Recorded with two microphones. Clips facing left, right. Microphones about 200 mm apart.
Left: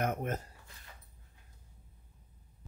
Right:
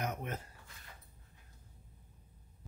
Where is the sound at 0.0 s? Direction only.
50° left (ahead or behind).